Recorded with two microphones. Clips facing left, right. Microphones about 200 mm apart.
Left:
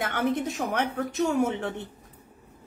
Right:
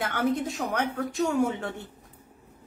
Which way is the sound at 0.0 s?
20° left (ahead or behind).